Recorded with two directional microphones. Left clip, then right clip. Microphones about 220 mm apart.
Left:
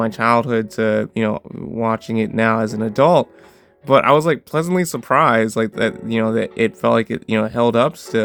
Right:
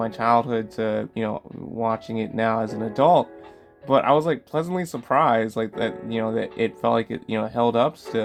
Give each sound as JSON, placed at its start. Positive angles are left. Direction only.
{"t": 0.0, "sound": "speech", "side_deg": 45}